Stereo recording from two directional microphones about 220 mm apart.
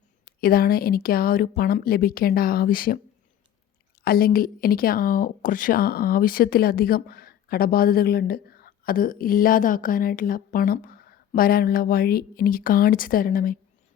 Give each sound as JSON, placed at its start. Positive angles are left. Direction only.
{"t": 0.3, "sound": "speech", "side_deg": 40}
{"t": 4.0, "sound": "speech", "side_deg": 45}